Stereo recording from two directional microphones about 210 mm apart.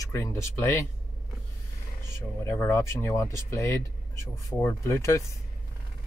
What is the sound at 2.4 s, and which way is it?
Speech, 10° left (ahead or behind).